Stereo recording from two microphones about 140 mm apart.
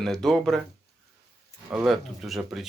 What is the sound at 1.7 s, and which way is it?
Speech, 5° right (ahead or behind).